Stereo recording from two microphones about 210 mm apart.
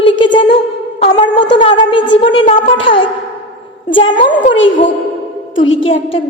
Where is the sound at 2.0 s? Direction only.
60° left (ahead or behind).